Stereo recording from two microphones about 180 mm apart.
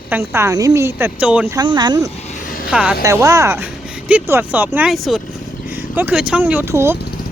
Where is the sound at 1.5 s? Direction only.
25° right (ahead or behind).